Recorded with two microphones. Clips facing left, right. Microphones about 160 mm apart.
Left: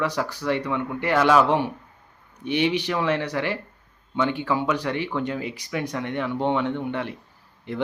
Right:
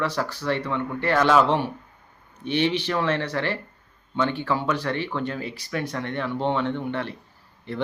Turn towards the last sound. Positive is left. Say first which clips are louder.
# left 1 dB
turn(degrees=15)  # may be behind; listen again after turning